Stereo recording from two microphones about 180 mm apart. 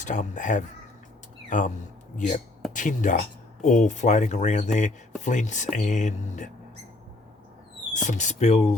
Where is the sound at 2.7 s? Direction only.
45° left (ahead or behind).